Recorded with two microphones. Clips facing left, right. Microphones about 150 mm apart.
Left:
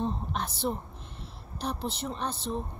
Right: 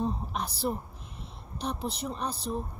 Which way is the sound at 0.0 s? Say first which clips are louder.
Even; centre (ahead or behind).